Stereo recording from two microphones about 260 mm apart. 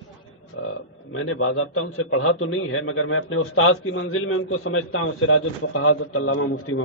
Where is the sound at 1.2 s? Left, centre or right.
Left.